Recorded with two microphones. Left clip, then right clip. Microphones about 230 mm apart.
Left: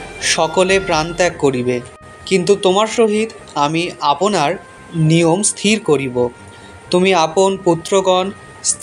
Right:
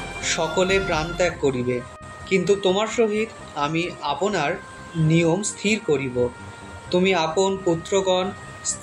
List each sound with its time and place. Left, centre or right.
0.2 s music: left
0.6 s speech: left